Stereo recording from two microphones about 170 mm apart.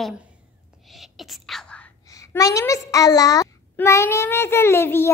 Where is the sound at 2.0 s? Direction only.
20° left (ahead or behind).